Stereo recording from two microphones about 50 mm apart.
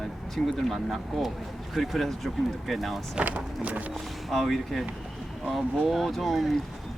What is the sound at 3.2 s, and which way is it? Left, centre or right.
Speech, right.